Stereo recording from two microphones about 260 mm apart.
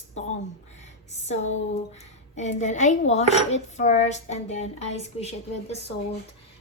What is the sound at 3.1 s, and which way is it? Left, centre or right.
Dishes, left.